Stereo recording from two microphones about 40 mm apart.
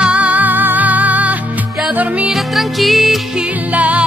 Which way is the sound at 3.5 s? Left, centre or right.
Right.